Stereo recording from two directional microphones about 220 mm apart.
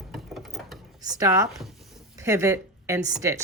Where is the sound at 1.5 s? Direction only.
Centre (ahead or behind).